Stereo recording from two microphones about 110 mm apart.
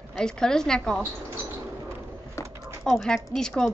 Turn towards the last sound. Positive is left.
turn(degrees=5)  # may be behind; listen again after turning